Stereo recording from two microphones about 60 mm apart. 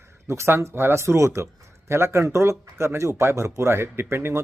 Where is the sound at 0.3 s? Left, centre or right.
Right.